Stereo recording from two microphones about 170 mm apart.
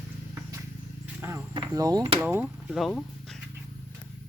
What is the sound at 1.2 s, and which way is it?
A woman's voice, 20° right (ahead or behind).